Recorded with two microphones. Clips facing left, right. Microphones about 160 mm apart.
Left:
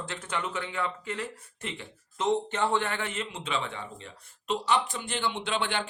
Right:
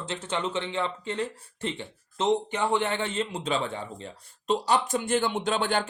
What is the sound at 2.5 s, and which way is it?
A man's voice, 15° right (ahead or behind).